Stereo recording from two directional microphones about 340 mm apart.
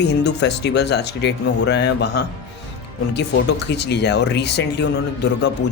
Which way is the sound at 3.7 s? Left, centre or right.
Left.